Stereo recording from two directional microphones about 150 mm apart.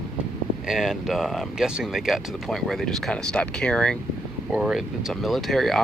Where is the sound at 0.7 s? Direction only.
Centre (ahead or behind).